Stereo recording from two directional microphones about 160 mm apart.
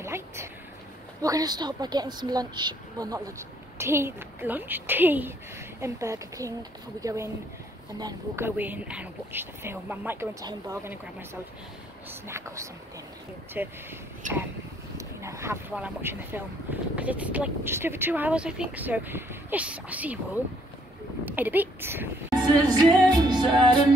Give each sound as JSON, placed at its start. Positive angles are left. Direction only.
{"t": 0.0, "sound": "a sound", "side_deg": -15}
{"t": 1.2, "sound": "a woman's voice", "side_deg": -25}
{"t": 14.2, "sound": "speech", "side_deg": -50}
{"t": 15.0, "sound": "a sound", "side_deg": -20}
{"t": 15.7, "sound": "speech", "side_deg": -10}
{"t": 21.3, "sound": "speech", "side_deg": -10}
{"t": 22.3, "sound": "a woman's voice", "side_deg": -25}